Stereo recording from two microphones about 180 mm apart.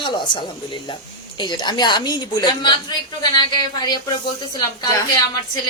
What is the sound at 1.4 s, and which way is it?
A woman's voice, 25° left (ahead or behind).